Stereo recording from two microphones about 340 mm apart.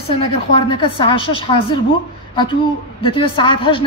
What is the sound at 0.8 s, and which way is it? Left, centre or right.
A woman's voice, centre.